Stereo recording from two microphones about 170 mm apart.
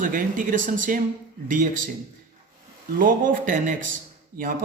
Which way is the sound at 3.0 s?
55° right (ahead or behind).